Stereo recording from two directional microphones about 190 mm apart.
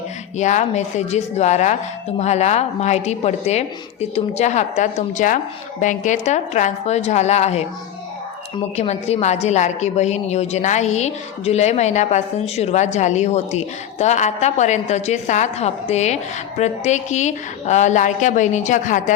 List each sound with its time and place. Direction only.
0.3 s a woman's voice: 40° left (ahead or behind)
8.7 s a woman's voice: 35° left (ahead or behind)